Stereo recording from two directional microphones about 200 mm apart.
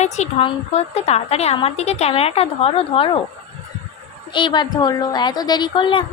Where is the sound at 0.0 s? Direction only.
30° left (ahead or behind).